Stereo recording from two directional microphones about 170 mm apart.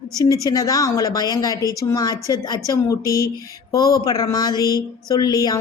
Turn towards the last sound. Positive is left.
turn(degrees=20)  # may be behind; listen again after turning